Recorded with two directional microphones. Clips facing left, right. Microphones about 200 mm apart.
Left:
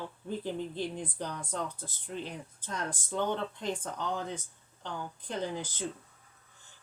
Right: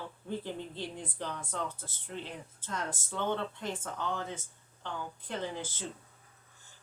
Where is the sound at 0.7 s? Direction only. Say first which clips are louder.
Left 4 dB; 15° left (ahead or behind).